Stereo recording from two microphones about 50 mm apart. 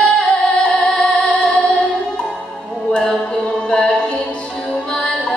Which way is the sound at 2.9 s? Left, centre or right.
Centre.